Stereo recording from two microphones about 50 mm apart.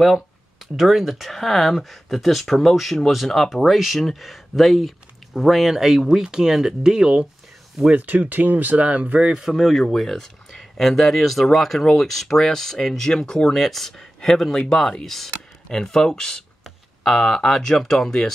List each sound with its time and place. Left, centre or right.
0.7 s speech: centre
7.9 s speech: right
9.3 s speech: centre